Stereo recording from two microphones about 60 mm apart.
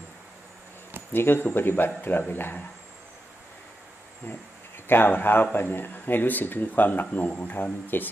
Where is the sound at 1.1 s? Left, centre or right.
Left.